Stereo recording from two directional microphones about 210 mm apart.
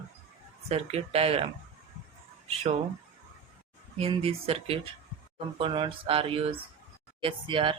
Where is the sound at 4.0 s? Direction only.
25° right (ahead or behind).